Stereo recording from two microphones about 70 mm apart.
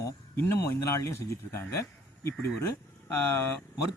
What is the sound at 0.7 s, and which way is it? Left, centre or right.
Speech, left.